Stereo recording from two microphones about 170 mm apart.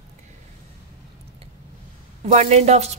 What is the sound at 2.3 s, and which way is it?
Speech, 40° right (ahead or behind).